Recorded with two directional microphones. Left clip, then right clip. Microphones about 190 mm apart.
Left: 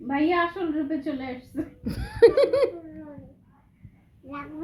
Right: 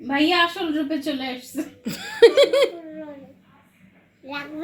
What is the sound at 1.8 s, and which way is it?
Laughter, centre (ahead or behind).